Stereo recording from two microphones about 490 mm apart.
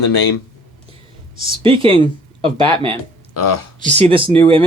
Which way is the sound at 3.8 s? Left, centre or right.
Centre.